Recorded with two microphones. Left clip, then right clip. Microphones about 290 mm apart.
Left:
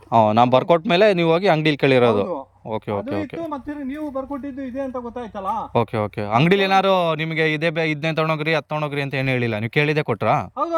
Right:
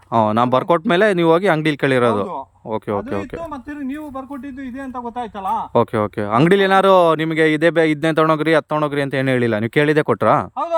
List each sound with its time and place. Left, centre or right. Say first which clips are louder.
0.1 s speech: left 1 dB; centre
5.7 s speech: right 5 dB; centre